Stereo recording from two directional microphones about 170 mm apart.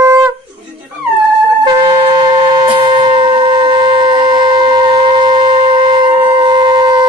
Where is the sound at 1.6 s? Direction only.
25° right (ahead or behind).